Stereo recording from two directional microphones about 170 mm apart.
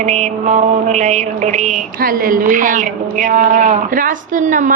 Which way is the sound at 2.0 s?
55° right (ahead or behind).